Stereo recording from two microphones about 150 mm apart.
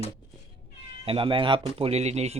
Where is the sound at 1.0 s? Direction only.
35° right (ahead or behind).